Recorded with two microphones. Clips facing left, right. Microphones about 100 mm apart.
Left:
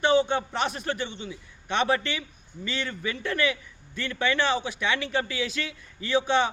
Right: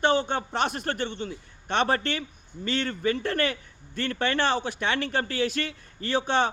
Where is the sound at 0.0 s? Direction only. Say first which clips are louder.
Left 2 dB; 50° right (ahead or behind).